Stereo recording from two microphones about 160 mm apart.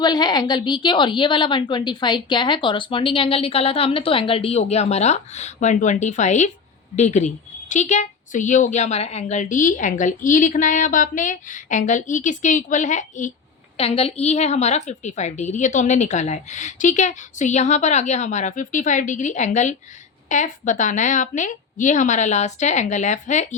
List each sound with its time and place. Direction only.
0.0 s a woman's voice: 25° left (ahead or behind); by 13.3 s 50° left (ahead or behind)
13.7 s a woman's voice: 40° left (ahead or behind)